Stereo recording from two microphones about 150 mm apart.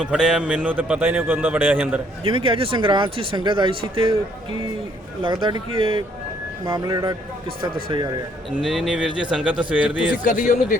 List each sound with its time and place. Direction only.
0.0 s a man's voice: 5° right (ahead or behind)
2.2 s speech: 35° right (ahead or behind)
5.2 s a man's voice: 30° right (ahead or behind)
8.4 s a man's voice: centre (ahead or behind)
10.2 s a man's voice: 55° left (ahead or behind)